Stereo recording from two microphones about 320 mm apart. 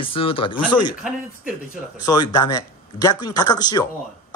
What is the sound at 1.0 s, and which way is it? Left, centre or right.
Speech, centre.